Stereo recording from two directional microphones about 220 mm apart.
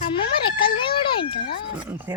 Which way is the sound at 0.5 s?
25° left (ahead or behind).